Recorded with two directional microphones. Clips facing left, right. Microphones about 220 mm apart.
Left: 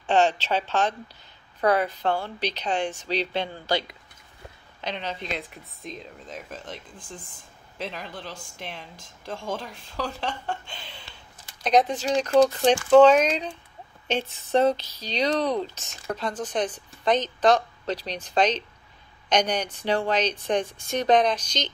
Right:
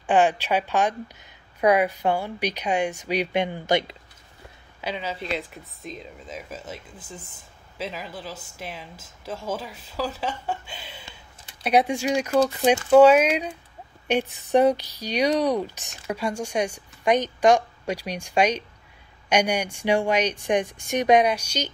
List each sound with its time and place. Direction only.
0.0 s speech: 15° right (ahead or behind)
4.8 s speech: 5° right (ahead or behind)